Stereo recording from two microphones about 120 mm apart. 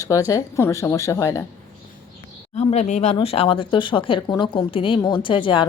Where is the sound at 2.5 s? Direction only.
70° left (ahead or behind).